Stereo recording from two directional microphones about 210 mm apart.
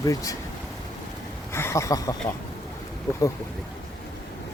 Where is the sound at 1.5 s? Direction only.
10° left (ahead or behind).